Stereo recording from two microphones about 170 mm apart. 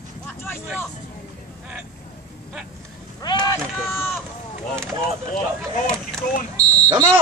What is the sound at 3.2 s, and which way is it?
Vehicle, 25° left (ahead or behind).